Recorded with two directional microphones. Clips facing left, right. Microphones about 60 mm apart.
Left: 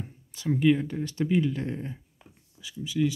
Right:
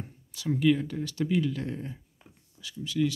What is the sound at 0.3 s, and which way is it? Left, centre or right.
Speech, left.